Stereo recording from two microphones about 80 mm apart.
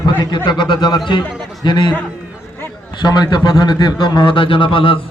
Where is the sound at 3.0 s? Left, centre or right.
Left.